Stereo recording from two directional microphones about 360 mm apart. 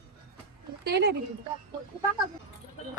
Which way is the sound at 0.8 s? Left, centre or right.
Right.